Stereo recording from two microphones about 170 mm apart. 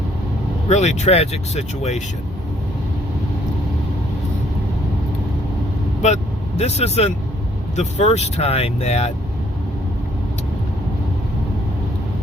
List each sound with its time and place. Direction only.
0.7 s speech: 40° left (ahead or behind)
6.0 s speech: 40° left (ahead or behind)